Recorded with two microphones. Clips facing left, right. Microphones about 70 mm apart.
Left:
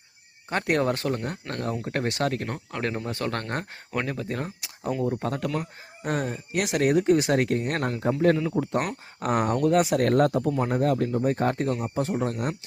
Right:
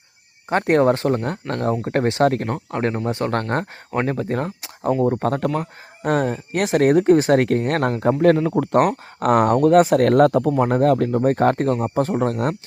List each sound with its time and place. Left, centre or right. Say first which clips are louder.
0.5 s speech: right 8 dB; right
2.7 s speech: right 7 dB; right
3.5 s speech: right 7 dB; right
5.2 s speech: right 7 dB; right
10.1 s speech: right 7 dB; right